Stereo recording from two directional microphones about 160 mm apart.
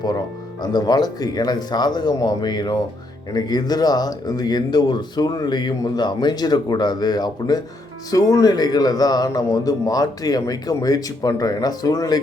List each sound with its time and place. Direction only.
0.6 s speech: 25° left (ahead or behind)